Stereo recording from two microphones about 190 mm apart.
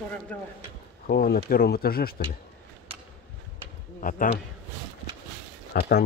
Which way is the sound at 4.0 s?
45° left (ahead or behind).